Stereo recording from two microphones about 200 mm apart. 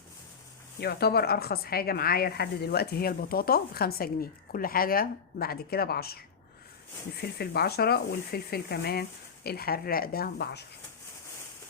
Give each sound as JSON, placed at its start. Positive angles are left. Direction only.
{"t": 0.8, "sound": "a woman's voice", "side_deg": 50}
{"t": 7.2, "sound": "a woman's voice", "side_deg": 55}